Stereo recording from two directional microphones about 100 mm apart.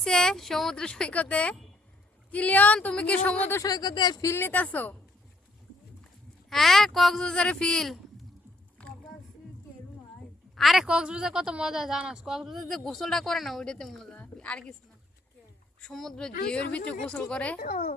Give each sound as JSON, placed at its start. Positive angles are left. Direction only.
{"t": 0.0, "sound": "speech", "side_deg": 5}
{"t": 3.6, "sound": "speech", "side_deg": 40}
{"t": 4.2, "sound": "speech", "side_deg": 25}
{"t": 6.5, "sound": "speech", "side_deg": 5}
{"t": 8.8, "sound": "a sound", "side_deg": 10}
{"t": 10.5, "sound": "speech", "side_deg": 0}
{"t": 15.8, "sound": "speech", "side_deg": 5}